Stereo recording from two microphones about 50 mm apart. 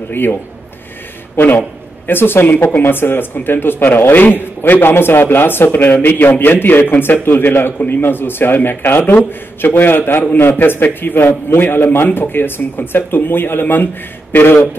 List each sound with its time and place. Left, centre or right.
0.1 s a man's voice: left
2.0 s a man's voice: left